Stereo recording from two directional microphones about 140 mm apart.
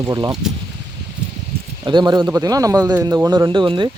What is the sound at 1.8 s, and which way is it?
Speech, 30° right (ahead or behind).